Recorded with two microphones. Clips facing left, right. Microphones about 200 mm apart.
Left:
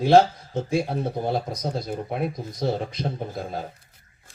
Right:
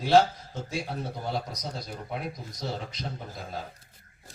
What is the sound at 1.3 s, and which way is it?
Speech, 55° left (ahead or behind).